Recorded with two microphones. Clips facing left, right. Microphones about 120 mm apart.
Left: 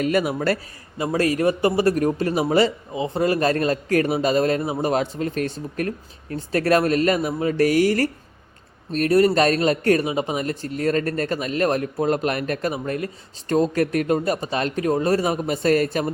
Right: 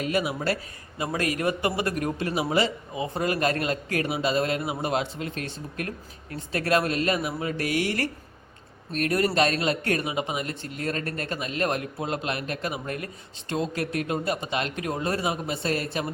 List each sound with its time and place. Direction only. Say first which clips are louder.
0.0 s speech: left 6 dB; 50° left (ahead or behind)
0.9 s speech: left 7 dB; 30° left (ahead or behind)
2.9 s speech: left 6 dB; 25° left (ahead or behind)
13.5 s speech: left 8 dB; 45° left (ahead or behind)